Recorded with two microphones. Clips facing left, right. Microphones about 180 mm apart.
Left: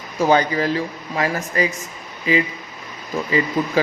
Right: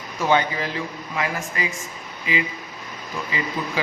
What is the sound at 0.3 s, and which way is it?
Speech, 40° left (ahead or behind).